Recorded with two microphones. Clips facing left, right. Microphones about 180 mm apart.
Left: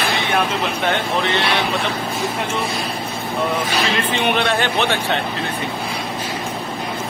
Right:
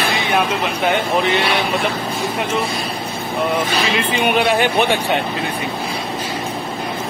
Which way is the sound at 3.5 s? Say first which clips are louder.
Right 2 dB; 10° right (ahead or behind).